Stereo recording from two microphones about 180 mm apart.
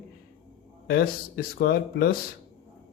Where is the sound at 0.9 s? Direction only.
60° left (ahead or behind).